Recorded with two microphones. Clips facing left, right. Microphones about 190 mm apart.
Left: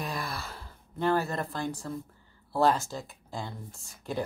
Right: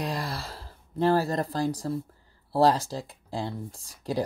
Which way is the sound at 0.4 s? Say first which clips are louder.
Right 2 dB; 30° right (ahead or behind).